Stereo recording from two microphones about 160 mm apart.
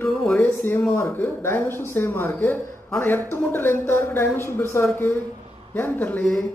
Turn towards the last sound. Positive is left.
turn(degrees=10)  # may be behind; listen again after turning